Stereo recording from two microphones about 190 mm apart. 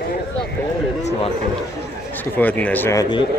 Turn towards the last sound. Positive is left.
turn(degrees=15)  # may be behind; listen again after turning